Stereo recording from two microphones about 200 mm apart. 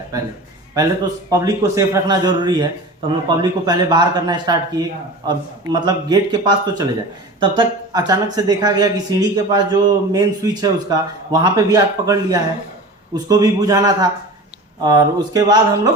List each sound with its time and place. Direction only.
1.3 s a man's voice: 15° right (ahead or behind)